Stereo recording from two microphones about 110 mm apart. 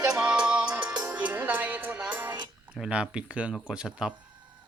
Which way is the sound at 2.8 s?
10° right (ahead or behind).